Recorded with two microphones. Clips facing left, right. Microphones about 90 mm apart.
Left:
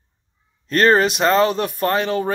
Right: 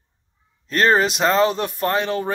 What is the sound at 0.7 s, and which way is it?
Speech, 5° right (ahead or behind).